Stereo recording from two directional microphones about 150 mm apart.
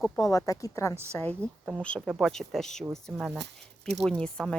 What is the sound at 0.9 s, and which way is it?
Speech, 15° right (ahead or behind).